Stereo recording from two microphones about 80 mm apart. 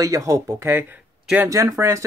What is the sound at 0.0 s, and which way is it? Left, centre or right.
Speech, right.